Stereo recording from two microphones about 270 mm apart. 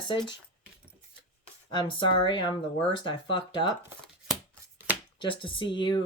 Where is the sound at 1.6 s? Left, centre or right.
Centre.